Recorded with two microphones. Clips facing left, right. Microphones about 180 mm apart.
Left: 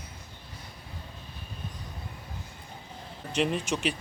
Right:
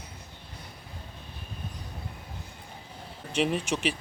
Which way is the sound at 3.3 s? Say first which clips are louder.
Right 1 dB; 5° right (ahead or behind).